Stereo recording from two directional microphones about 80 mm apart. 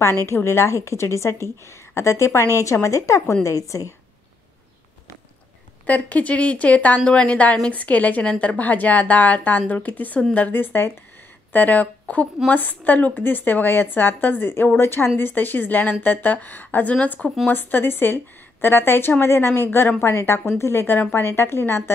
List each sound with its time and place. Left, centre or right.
0.3 s a woman's voice: left
5.9 s a woman's voice: centre